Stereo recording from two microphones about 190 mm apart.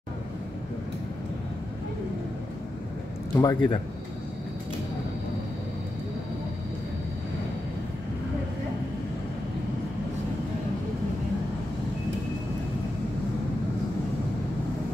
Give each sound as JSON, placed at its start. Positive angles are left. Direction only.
{"t": 3.3, "sound": "a man's voice", "side_deg": 25}